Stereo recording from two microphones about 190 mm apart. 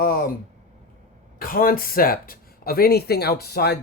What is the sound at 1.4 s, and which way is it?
Speech, 50° left (ahead or behind).